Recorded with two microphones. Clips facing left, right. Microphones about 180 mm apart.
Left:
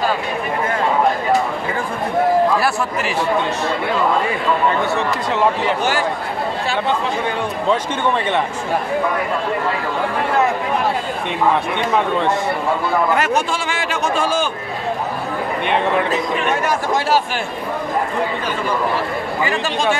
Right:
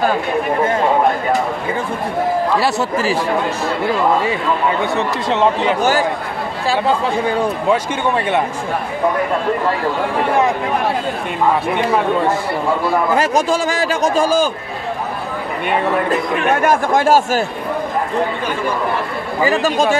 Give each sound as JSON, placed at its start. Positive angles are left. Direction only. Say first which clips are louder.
{"t": 5.3, "sound": "speech", "louder": "right 3 dB", "side_deg": -20}
{"t": 5.8, "sound": "speech", "louder": "right 4 dB", "side_deg": -45}
{"t": 7.7, "sound": "speech", "louder": "right 2 dB", "side_deg": -10}
{"t": 13.1, "sound": "a man's voice", "louder": "right 3 dB", "side_deg": -35}
{"t": 16.6, "sound": "speech", "louder": "right 5 dB", "side_deg": -50}
{"t": 19.4, "sound": "a man's voice", "louder": "right 6 dB", "side_deg": -40}